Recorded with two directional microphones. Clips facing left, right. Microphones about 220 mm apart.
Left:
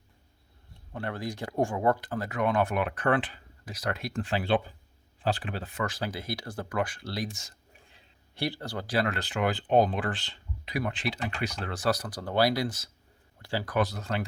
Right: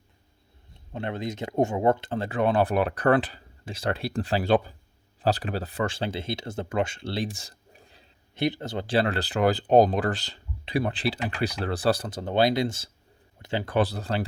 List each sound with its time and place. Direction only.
0.9 s speech: 20° right (ahead or behind); by 8.0 s 35° right (ahead or behind)
8.4 s speech: 20° right (ahead or behind)